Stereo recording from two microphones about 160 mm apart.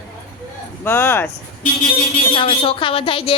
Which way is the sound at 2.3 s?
35° left (ahead or behind).